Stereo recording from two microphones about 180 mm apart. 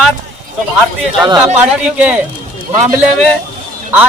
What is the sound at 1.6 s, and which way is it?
Speech, 10° right (ahead or behind).